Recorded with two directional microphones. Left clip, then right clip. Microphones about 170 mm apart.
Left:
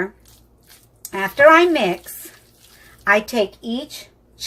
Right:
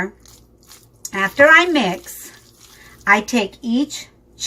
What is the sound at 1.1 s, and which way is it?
Speech, 40° left (ahead or behind).